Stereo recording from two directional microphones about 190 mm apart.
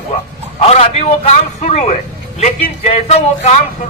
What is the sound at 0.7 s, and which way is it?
A man's voice, 30° left (ahead or behind).